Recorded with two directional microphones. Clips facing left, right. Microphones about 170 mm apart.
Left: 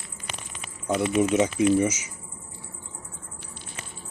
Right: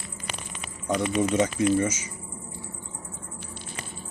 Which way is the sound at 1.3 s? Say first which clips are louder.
Left 2 dB; 10° left (ahead or behind).